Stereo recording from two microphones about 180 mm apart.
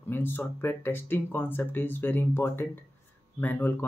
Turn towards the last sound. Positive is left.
turn(degrees=10)  # may be behind; listen again after turning